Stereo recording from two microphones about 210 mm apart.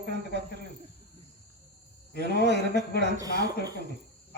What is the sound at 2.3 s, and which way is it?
Speech, 55° right (ahead or behind).